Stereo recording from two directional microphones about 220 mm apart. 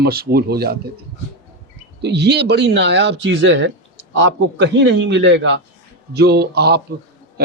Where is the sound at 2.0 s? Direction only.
50° right (ahead or behind).